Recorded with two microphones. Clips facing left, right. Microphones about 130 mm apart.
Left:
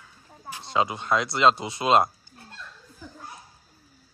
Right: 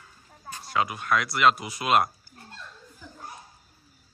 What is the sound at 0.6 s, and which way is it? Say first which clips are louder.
Speech: left 2 dB; 25° left (ahead or behind).